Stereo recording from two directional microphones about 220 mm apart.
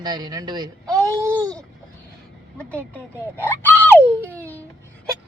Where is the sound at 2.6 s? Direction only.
5° left (ahead or behind).